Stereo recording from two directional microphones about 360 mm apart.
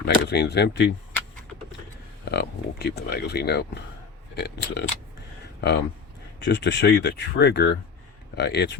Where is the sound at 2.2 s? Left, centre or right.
Left.